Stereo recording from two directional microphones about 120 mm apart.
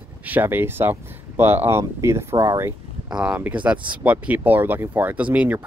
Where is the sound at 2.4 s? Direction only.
25° right (ahead or behind).